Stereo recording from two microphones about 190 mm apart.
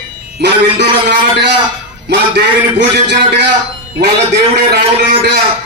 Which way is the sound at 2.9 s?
60° right (ahead or behind).